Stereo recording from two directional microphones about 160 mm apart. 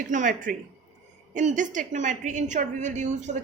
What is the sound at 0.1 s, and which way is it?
A woman's voice, 55° right (ahead or behind).